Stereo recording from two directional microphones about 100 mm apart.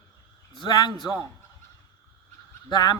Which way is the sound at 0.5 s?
50° left (ahead or behind).